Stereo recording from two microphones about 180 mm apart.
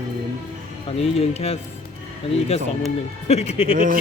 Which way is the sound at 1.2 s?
35° left (ahead or behind).